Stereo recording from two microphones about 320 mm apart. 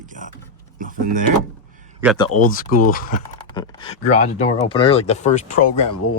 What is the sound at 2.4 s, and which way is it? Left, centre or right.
Speech, left.